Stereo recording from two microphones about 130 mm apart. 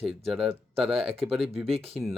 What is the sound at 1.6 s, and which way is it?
Speech, 50° right (ahead or behind).